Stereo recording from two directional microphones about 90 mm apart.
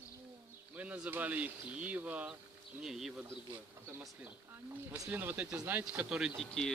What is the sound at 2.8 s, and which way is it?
Speech, 5° right (ahead or behind).